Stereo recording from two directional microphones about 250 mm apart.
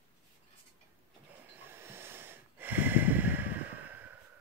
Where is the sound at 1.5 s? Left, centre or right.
Centre.